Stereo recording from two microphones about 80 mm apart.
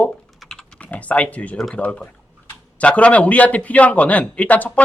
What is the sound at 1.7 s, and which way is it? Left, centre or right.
A man's voice, centre.